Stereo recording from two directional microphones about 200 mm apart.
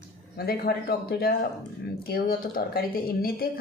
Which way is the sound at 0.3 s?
50° left (ahead or behind).